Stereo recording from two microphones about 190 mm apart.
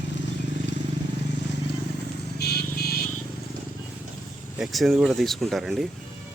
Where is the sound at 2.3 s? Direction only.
55° left (ahead or behind).